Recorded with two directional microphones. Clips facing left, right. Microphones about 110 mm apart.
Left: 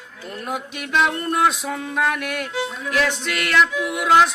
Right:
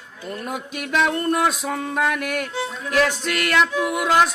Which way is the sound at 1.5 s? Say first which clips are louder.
Right 1 dB; 45° right (ahead or behind).